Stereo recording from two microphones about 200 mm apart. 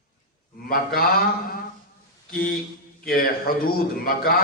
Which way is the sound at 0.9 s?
45° left (ahead or behind).